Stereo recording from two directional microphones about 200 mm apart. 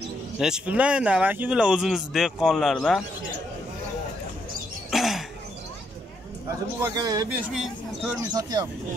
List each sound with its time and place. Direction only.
0.4 s speech: 5° right (ahead or behind)
4.9 s a sound: centre (ahead or behind)
6.8 s speech: 20° right (ahead or behind)
7.2 s speech: centre (ahead or behind)
8.2 s speech: 20° right (ahead or behind)